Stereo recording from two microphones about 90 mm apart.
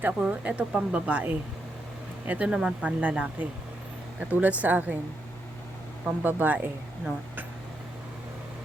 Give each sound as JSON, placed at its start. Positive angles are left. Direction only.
{"t": 0.0, "sound": "speech", "side_deg": -15}
{"t": 6.2, "sound": "speech", "side_deg": -20}